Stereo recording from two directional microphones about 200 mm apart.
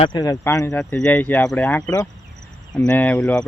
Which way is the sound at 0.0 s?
20° left (ahead or behind).